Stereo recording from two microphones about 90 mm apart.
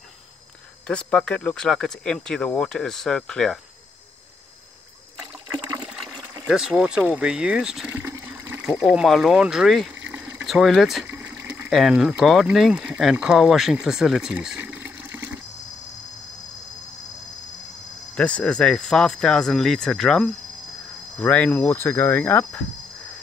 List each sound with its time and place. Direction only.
0.8 s speech: 10° left (ahead or behind)
6.4 s speech: 5° right (ahead or behind)
7.7 s water: 10° right (ahead or behind)
10.4 s speech: centre (ahead or behind)
11.1 s water: 20° right (ahead or behind)
11.7 s speech: 5° right (ahead or behind)
14.6 s water: 20° right (ahead or behind)
18.1 s speech: 15° left (ahead or behind)
21.2 s speech: 15° left (ahead or behind)